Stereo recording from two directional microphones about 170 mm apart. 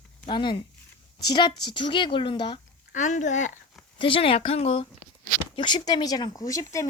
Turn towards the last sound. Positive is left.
turn(degrees=20)  # may be behind; listen again after turning